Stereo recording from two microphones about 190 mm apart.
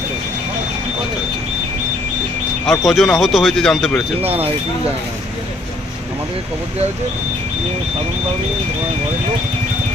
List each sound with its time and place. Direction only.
2.6 s speech: centre (ahead or behind)